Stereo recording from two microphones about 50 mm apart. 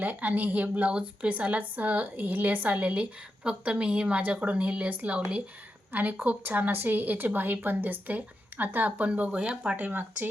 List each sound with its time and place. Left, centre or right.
0.0 s a woman's voice: right
0.9 s a woman's voice: right
5.9 s a woman's voice: right
9.7 s a woman's voice: right